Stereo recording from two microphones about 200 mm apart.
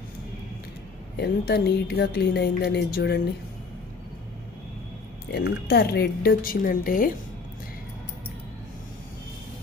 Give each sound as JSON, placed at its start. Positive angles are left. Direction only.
{"t": 1.2, "sound": "speech", "side_deg": 55}
{"t": 5.3, "sound": "speech", "side_deg": 55}